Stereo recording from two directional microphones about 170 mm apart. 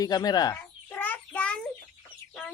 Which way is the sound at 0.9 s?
10° left (ahead or behind).